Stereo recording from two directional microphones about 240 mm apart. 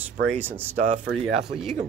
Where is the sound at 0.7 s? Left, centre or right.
Right.